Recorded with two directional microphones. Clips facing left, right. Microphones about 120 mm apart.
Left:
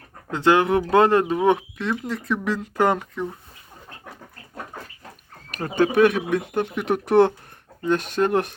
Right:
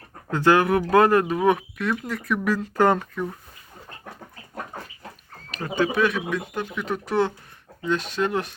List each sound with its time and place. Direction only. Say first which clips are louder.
0.3 s speech: even; 20° left (ahead or behind)
5.5 s speech: left 3 dB; 50° left (ahead or behind)